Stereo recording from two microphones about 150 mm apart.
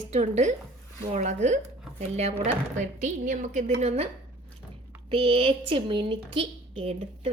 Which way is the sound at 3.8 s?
45° right (ahead or behind).